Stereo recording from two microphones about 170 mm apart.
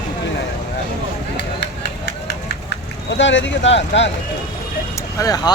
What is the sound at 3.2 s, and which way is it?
Speech, 90° left.